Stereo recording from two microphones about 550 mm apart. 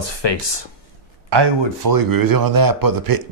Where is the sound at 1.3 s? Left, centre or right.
Right.